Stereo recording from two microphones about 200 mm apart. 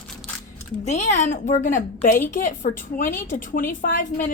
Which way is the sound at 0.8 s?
35° left (ahead or behind).